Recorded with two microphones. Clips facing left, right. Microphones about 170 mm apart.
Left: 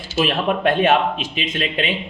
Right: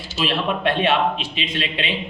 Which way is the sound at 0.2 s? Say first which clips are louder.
Left 3 dB; 45° left (ahead or behind).